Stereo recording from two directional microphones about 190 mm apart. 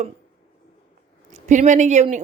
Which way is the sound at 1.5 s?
40° right (ahead or behind).